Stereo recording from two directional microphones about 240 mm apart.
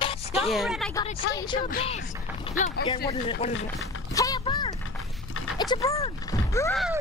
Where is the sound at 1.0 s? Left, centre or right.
Centre.